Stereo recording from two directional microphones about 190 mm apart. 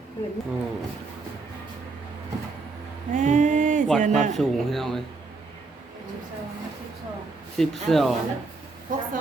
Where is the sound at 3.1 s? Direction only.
40° right (ahead or behind).